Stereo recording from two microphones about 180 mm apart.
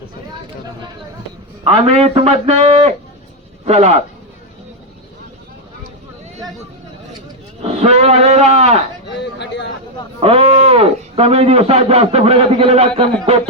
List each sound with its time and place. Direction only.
1.6 s a man's voice: 35° right (ahead or behind)
7.7 s a man's voice: 35° right (ahead or behind)
9.1 s speech: 75° left (ahead or behind)
10.2 s a man's voice: 35° right (ahead or behind)